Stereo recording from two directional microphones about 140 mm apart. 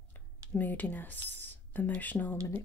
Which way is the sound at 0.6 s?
10° left (ahead or behind).